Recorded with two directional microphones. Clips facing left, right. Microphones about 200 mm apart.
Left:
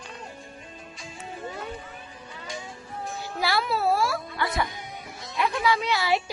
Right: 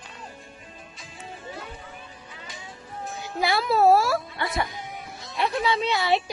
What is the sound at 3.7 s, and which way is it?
Speech, 40° right (ahead or behind).